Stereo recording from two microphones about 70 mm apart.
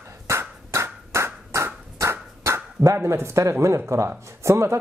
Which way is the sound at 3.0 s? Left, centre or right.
Right.